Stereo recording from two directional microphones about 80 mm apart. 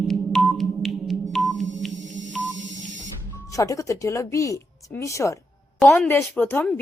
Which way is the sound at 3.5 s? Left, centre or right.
Left.